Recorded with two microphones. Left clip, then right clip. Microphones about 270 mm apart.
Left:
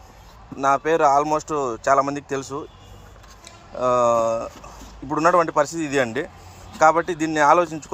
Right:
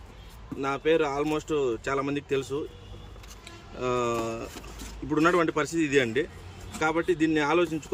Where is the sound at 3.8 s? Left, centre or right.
Centre.